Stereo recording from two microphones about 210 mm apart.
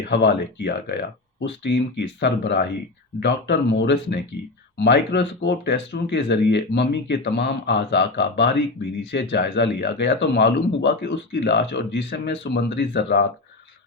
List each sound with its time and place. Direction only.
0.0 s speech: 55° left (ahead or behind)